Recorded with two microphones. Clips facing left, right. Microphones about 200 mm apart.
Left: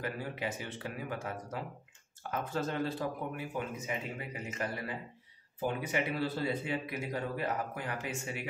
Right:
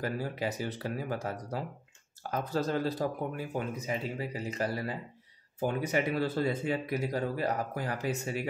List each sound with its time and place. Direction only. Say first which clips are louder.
0.0 s speech: right 4 dB; 40° right (ahead or behind)